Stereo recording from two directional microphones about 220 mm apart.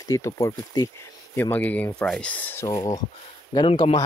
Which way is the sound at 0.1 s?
15° left (ahead or behind).